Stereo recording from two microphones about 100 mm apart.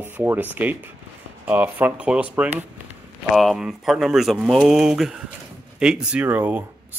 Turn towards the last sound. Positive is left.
turn(degrees=-15)  # may be behind; listen again after turning